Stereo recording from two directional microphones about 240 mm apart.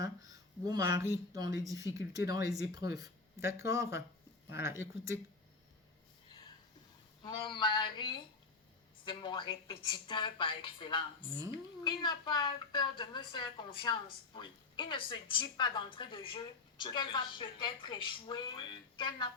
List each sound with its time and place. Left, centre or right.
0.0 s speech: centre
7.4 s a woman's voice: centre